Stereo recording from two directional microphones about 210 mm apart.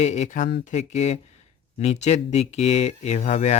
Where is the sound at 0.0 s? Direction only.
35° left (ahead or behind).